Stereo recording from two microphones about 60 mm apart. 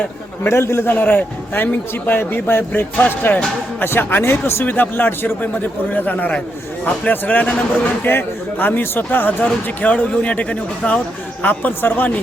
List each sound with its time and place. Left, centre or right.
0.4 s speech: left
0.9 s a man's voice: left
11.4 s a man's voice: left